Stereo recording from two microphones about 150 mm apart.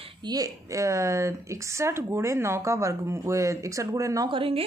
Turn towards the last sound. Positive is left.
turn(degrees=-35)  # may be behind; listen again after turning